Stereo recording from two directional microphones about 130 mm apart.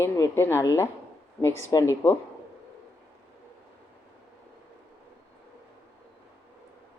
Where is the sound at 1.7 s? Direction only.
25° left (ahead or behind).